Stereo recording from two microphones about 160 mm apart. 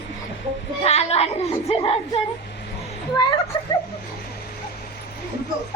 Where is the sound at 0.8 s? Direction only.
40° left (ahead or behind).